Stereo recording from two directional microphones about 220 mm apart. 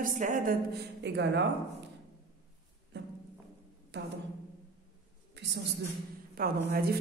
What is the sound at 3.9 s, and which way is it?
Speech, 50° right (ahead or behind).